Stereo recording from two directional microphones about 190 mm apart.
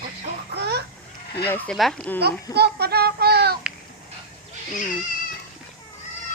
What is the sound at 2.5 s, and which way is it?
Child singing, 60° right (ahead or behind).